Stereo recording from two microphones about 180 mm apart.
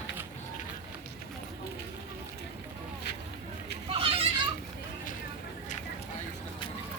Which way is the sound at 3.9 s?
30° right (ahead or behind).